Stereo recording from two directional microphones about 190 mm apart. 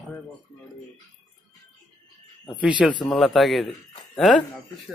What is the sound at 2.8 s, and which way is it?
A man's voice, centre (ahead or behind).